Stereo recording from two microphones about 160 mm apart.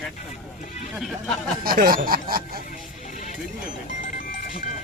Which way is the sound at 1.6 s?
65° right (ahead or behind).